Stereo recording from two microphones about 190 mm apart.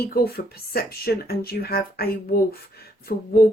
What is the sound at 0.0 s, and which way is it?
Speech, 55° left (ahead or behind).